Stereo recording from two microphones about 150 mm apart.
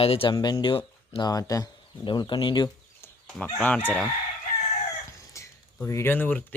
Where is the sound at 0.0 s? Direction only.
40° left (ahead or behind).